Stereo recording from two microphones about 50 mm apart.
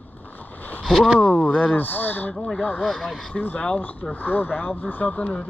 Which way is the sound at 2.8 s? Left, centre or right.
Centre.